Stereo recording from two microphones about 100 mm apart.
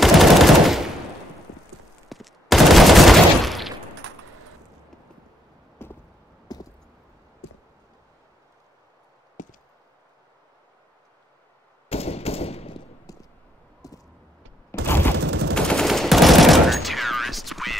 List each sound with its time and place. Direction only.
0.0 s machine gun: centre (ahead or behind)
2.0 s fusillade: centre (ahead or behind)
5.8 s chop: 25° left (ahead or behind)
6.5 s a sound: 40° left (ahead or behind)
11.9 s machine gun: 90° left
13.1 s vehicle: 35° left (ahead or behind)
13.8 s a sound: 35° left (ahead or behind)
14.7 s fusillade: 25° left (ahead or behind)
15.5 s machine gun: 10° left (ahead or behind)